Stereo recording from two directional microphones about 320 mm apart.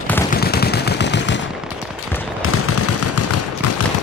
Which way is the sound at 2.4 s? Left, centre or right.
Left.